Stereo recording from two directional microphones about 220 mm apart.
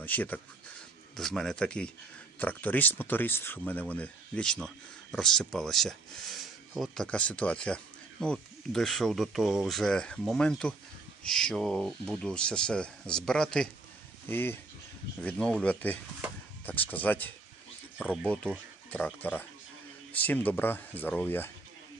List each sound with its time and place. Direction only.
0.0 s speech: 10° left (ahead or behind)
18.9 s speech: 5° left (ahead or behind)